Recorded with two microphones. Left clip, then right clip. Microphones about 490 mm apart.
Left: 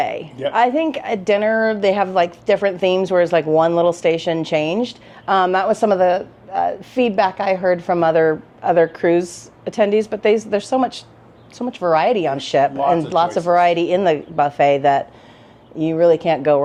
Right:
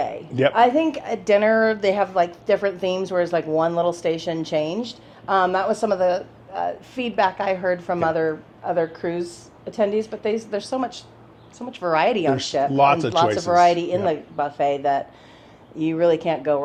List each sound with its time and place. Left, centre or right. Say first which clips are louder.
0.5 s a woman's voice: left 4 dB; left
8.0 s speech: left 7 dB; left
8.7 s a woman's voice: left 9 dB; left
12.7 s speech: even; right
13.1 s a woman's voice: left 3 dB; left